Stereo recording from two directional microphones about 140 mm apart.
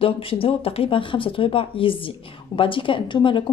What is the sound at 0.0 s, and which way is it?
Speech, 40° left (ahead or behind).